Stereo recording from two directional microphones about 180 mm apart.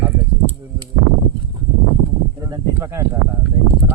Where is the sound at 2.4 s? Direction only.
15° right (ahead or behind).